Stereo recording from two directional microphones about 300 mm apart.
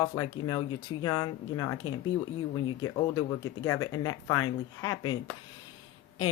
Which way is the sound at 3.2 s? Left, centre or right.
Centre.